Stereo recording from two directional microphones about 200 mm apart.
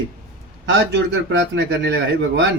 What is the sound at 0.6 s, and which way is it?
A man's voice, 65° right (ahead or behind).